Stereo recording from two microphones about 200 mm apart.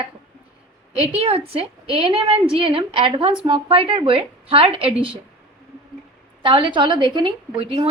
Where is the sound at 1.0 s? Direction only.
30° right (ahead or behind).